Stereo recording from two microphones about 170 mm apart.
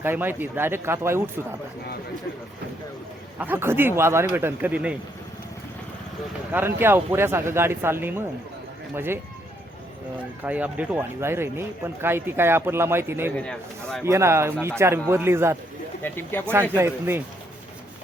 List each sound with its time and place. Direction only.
0.0 s speech: 10° right (ahead or behind)
3.3 s speech: 10° right (ahead or behind)
6.5 s speech: 10° right (ahead or behind)
10.4 s speech: 10° right (ahead or behind)
13.3 s speech: 5° left (ahead or behind)
14.0 s speech: 15° right (ahead or behind)
16.0 s speech: 10° left (ahead or behind)
16.7 s speech: 15° right (ahead or behind)